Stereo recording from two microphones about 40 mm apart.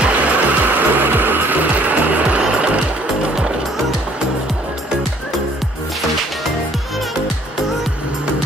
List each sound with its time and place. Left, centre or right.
0.0 s music: right
0.7 s music: right